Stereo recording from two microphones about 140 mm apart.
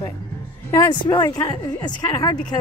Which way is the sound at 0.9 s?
30° left (ahead or behind).